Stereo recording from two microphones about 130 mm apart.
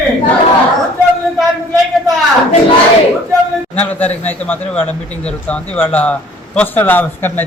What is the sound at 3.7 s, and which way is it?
A man's voice, 10° left (ahead or behind).